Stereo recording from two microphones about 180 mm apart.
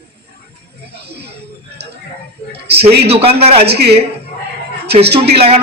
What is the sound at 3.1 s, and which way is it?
Speech, 35° right (ahead or behind).